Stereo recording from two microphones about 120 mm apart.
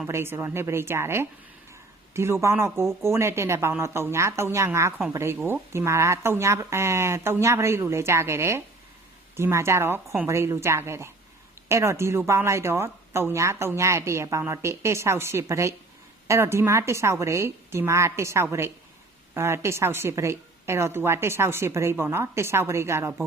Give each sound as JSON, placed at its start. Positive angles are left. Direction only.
{"t": 0.1, "sound": "speech", "side_deg": -20}